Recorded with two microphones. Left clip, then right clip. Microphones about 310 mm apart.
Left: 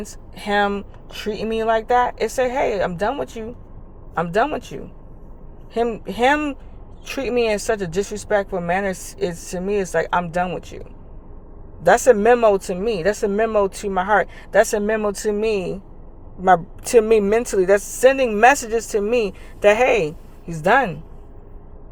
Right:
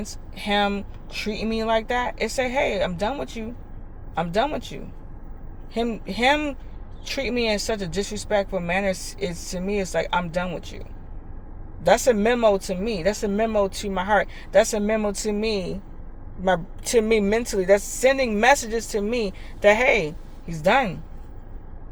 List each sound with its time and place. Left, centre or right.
0.3 s speech: centre
5.7 s speech: centre
12.0 s speech: centre